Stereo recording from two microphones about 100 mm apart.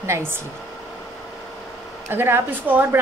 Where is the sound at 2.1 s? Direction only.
20° right (ahead or behind).